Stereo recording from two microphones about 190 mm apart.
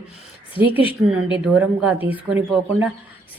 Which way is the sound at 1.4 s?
5° right (ahead or behind).